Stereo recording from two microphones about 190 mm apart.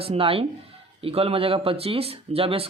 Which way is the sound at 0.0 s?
30° right (ahead or behind).